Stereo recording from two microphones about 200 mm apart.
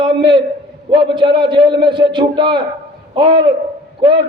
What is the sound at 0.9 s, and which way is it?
Speech, 25° right (ahead or behind).